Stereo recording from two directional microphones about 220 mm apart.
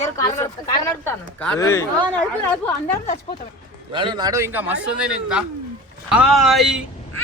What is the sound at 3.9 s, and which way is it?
A man's voice, 20° right (ahead or behind).